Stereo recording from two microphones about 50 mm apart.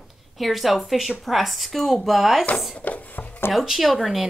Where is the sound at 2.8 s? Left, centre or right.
Left.